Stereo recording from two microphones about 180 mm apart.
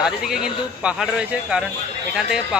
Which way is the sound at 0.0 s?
Centre (ahead or behind).